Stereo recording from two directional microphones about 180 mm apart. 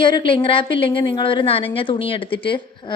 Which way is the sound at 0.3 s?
30° left (ahead or behind).